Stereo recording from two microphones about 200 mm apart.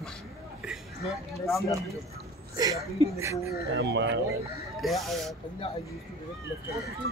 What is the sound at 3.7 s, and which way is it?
Speech, 60° right (ahead or behind).